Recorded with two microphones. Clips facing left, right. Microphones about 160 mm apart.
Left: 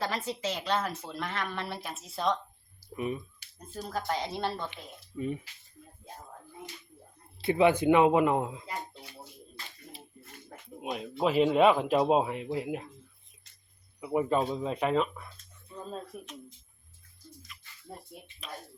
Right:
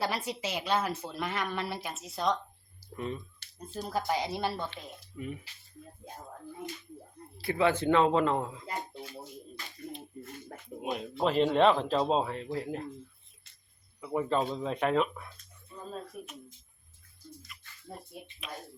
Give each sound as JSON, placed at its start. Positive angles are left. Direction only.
{"t": 0.0, "sound": "speech", "side_deg": -10}
{"t": 2.9, "sound": "a man's voice", "side_deg": 10}
{"t": 3.8, "sound": "speech", "side_deg": -10}
{"t": 7.3, "sound": "a man's voice", "side_deg": 20}
{"t": 10.8, "sound": "a man's voice", "side_deg": 0}
{"t": 14.0, "sound": "speech", "side_deg": 10}